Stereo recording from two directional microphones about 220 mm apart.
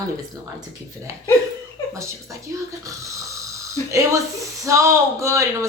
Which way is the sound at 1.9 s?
15° right (ahead or behind).